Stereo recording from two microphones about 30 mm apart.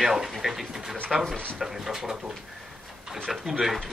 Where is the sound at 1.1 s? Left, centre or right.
Centre.